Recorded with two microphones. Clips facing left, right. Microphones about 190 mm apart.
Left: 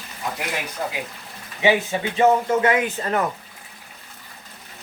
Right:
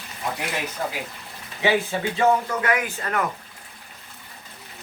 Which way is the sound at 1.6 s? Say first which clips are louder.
Left 2 dB; 20° left (ahead or behind).